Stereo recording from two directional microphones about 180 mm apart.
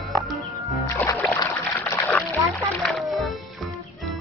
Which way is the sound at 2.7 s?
5° left (ahead or behind).